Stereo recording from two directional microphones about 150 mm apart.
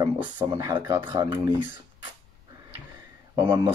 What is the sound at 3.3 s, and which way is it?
Speech, 25° right (ahead or behind).